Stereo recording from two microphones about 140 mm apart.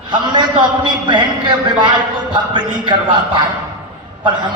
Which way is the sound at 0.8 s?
35° right (ahead or behind).